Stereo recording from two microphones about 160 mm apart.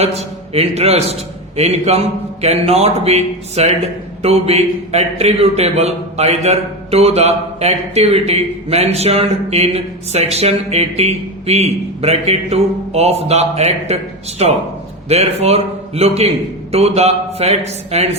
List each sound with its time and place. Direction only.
0.0 s a man's voice: 40° right (ahead or behind)